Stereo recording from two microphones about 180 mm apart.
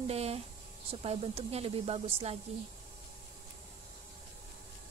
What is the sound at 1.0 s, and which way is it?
Speech, 30° right (ahead or behind).